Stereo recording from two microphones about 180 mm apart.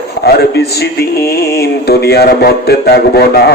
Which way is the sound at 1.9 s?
60° left (ahead or behind).